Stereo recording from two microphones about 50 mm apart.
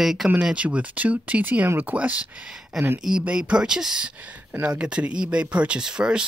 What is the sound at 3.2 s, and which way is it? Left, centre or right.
Speech, right.